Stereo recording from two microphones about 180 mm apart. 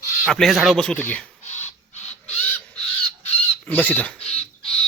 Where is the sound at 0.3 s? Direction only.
Centre (ahead or behind).